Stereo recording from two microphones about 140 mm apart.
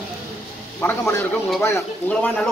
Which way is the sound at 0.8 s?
15° left (ahead or behind).